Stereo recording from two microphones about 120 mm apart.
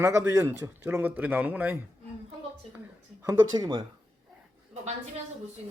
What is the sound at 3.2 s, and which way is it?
Speech, 35° right (ahead or behind).